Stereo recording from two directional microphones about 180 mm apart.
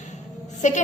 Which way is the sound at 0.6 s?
40° left (ahead or behind).